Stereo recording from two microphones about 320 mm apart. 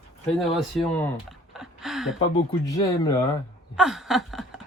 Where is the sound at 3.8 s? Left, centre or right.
Centre.